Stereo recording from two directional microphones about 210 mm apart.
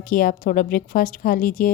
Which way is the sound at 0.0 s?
40° left (ahead or behind).